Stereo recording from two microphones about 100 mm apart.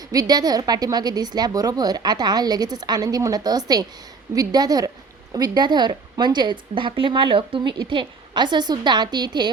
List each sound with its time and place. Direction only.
0.1 s a woman's voice: 40° right (ahead or behind)